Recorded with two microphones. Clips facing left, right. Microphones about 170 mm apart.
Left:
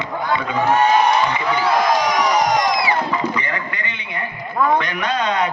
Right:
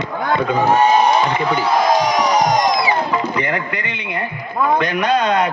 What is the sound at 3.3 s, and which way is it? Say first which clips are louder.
A man's voice: right 4 dB; 65° right (ahead or behind).